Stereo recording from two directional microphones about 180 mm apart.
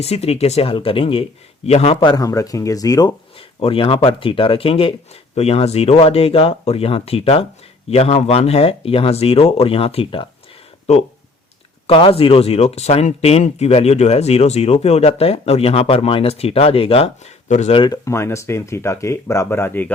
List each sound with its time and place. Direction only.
0.0 s speech: 35° left (ahead or behind)
17.7 s speech: 20° left (ahead or behind)